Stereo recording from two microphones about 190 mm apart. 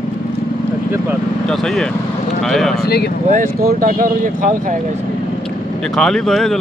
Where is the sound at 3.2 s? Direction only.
45° right (ahead or behind).